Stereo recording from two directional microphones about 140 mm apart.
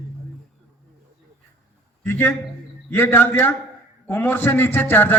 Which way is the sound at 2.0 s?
15° left (ahead or behind).